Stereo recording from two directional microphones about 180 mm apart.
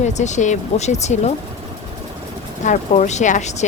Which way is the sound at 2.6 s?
40° left (ahead or behind).